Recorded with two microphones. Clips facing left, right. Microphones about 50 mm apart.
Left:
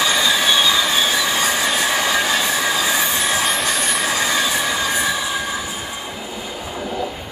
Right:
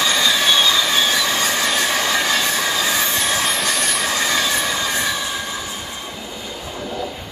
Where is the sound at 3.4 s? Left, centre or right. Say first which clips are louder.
Left 1 dB; centre.